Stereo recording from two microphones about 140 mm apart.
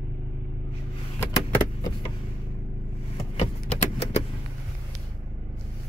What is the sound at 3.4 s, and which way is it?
Vehicle, 45° left (ahead or behind).